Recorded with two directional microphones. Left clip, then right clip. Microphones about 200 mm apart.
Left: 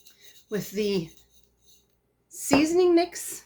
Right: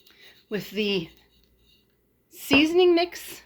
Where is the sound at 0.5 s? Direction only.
25° right (ahead or behind).